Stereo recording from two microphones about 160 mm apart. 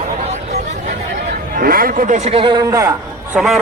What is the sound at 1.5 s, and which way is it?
Speech, 65° right (ahead or behind).